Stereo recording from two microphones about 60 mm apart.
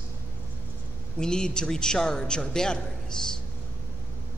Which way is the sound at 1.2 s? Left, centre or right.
Centre.